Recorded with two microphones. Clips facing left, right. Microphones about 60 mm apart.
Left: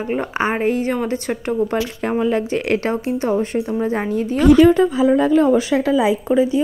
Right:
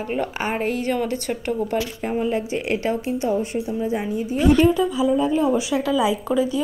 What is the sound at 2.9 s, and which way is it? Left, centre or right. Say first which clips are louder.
Speech: left 3 dB; left.